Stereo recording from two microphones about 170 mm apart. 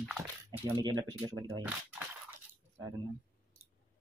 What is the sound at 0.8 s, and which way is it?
Speech, 25° right (ahead or behind).